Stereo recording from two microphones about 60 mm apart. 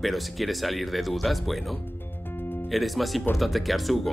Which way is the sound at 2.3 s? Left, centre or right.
Left.